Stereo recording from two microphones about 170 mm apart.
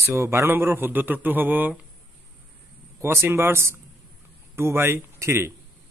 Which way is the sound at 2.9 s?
15° right (ahead or behind).